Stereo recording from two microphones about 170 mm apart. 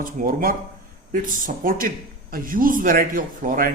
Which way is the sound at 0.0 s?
55° right (ahead or behind).